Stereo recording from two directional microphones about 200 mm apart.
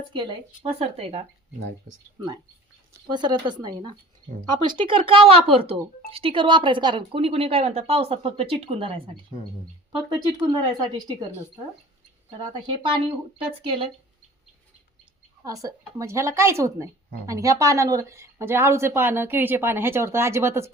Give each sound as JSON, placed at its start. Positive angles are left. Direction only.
{"t": 0.1, "sound": "a woman's voice", "side_deg": -25}
{"t": 3.1, "sound": "a woman's voice", "side_deg": -20}
{"t": 10.1, "sound": "a woman's voice", "side_deg": -20}
{"t": 12.4, "sound": "a woman's voice", "side_deg": -25}
{"t": 15.6, "sound": "speech", "side_deg": -15}